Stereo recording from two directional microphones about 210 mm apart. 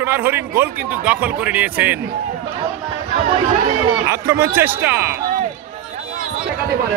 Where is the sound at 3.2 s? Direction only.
35° right (ahead or behind).